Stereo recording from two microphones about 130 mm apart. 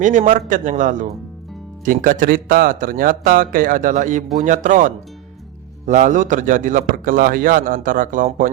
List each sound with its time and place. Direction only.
0.0 s a man's voice: 75° right (ahead or behind)
1.8 s a man's voice: 90° right